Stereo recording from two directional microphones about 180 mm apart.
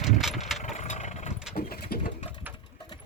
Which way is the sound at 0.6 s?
40° left (ahead or behind).